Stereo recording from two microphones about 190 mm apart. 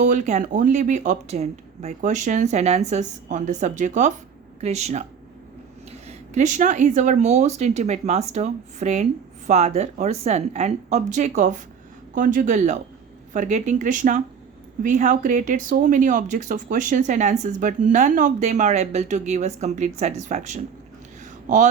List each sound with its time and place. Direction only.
0.0 s speech: 40° right (ahead or behind)
6.1 s speech: 40° right (ahead or behind)